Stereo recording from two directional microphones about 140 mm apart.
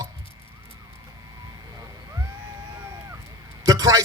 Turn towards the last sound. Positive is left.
turn(degrees=-25)  # may be behind; listen again after turning